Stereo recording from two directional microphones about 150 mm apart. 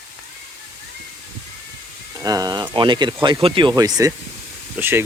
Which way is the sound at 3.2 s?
35° right (ahead or behind).